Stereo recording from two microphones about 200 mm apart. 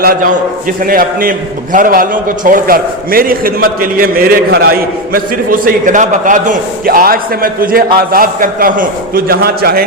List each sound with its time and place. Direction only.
0.0 s a man's voice: 50° right (ahead or behind)